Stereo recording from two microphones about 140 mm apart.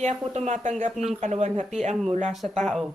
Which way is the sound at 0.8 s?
50° right (ahead or behind).